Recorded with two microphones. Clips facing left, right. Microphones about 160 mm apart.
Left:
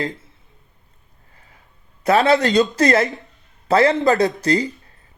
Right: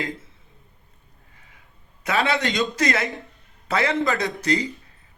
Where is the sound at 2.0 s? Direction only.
40° left (ahead or behind).